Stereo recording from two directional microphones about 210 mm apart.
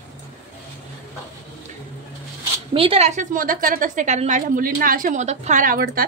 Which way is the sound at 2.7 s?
25° right (ahead or behind).